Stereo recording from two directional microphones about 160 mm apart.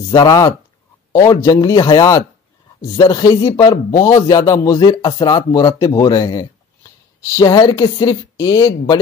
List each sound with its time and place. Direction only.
0.1 s a man's voice: 25° left (ahead or behind)